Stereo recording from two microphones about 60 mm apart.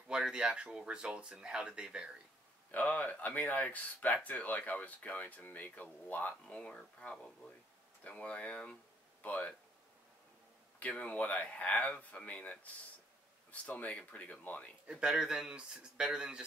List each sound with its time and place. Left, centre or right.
0.1 s speech: centre
2.7 s speech: left
6.4 s speech: centre
10.8 s speech: left
14.9 s speech: centre